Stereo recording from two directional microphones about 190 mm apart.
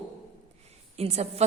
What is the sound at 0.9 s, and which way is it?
Speech, 35° right (ahead or behind).